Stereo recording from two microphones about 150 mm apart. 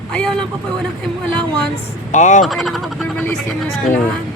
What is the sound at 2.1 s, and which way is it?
Speech, 55° left (ahead or behind).